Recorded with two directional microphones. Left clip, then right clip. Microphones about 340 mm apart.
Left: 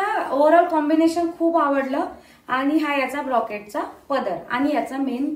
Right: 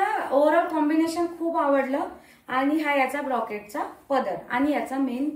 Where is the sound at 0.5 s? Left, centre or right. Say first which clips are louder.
Left 5 dB; centre.